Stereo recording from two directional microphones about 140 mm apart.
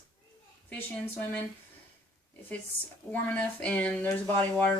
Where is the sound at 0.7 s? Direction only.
10° left (ahead or behind).